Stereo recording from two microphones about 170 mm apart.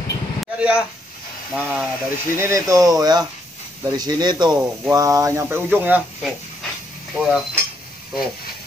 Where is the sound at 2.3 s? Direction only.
15° right (ahead or behind).